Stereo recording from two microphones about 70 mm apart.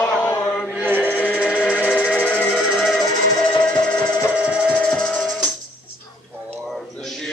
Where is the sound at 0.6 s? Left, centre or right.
Centre.